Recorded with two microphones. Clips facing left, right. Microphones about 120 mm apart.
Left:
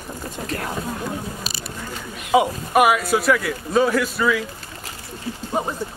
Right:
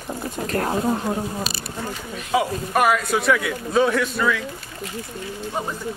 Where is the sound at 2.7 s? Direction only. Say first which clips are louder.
Left 3 dB; 10° left (ahead or behind).